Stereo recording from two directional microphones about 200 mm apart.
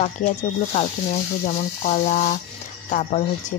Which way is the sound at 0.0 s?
35° left (ahead or behind).